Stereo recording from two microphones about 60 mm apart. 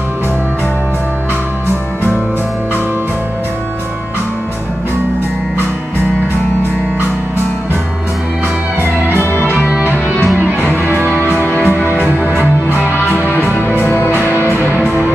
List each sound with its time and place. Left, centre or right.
9.1 s music: left
10.4 s music: right
11.2 s music: left
11.7 s music: right
12.4 s music: left